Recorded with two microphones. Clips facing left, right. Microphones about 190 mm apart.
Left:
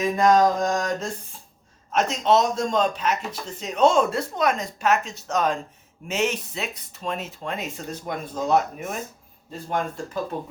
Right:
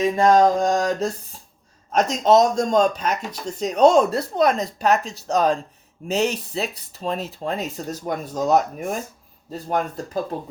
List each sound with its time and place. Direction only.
0.0 s speech: 30° right (ahead or behind)